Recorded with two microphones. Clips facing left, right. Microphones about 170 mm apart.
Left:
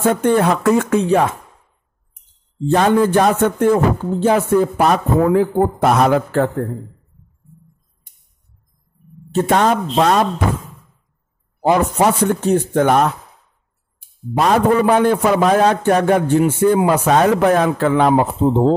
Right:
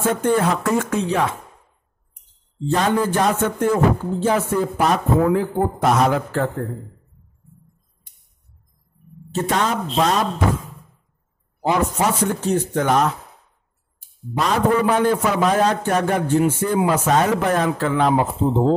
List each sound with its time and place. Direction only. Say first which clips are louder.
0.2 s a man's voice: left 4 dB; 60° left (ahead or behind)
2.7 s a man's voice: left 6 dB; 60° left (ahead or behind)
9.3 s a man's voice: left 6 dB; 60° left (ahead or behind)
11.6 s a man's voice: left 5 dB; 55° left (ahead or behind)